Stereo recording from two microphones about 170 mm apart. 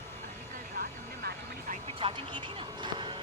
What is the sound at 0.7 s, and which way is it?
Vehicle, 65° right (ahead or behind).